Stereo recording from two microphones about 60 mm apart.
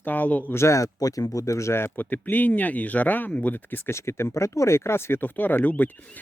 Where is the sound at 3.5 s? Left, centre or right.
Left.